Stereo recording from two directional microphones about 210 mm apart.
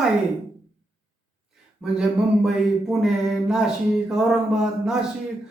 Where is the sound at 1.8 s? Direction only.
5° right (ahead or behind).